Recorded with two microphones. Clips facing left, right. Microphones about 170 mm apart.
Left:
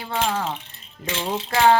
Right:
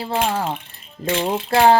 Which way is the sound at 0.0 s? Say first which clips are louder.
Right 3 dB; 30° right (ahead or behind).